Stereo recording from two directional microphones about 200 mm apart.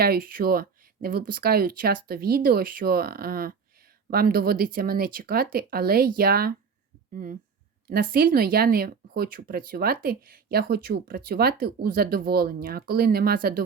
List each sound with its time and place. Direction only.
0.0 s speech: 50° right (ahead or behind)